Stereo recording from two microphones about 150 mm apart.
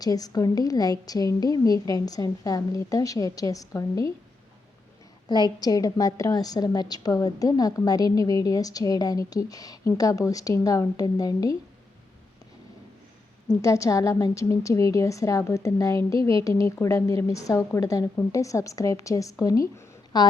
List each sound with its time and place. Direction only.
0.0 s a woman's voice: 25° left (ahead or behind)
5.3 s a woman's voice: 25° left (ahead or behind)
13.6 s a woman's voice: 20° left (ahead or behind)